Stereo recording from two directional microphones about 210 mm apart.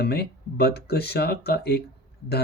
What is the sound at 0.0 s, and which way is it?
Speech, 50° left (ahead or behind).